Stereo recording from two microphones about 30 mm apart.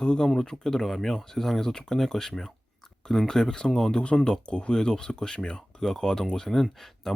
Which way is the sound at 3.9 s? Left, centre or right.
Left.